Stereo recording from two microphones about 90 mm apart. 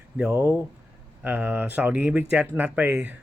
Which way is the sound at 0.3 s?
25° right (ahead or behind).